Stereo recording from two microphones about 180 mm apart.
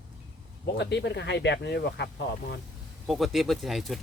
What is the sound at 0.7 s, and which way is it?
Speech, 70° left (ahead or behind).